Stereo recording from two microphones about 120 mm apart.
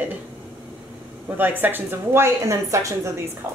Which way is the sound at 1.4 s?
15° right (ahead or behind).